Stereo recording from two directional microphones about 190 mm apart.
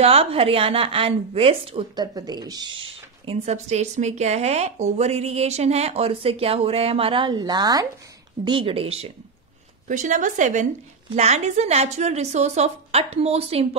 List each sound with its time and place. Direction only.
0.0 s speech: 30° right (ahead or behind)